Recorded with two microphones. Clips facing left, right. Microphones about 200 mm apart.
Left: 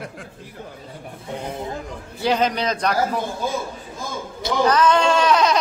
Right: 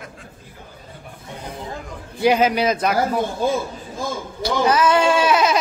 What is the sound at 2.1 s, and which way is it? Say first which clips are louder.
Speech: right 4 dB; 10° right (ahead or behind).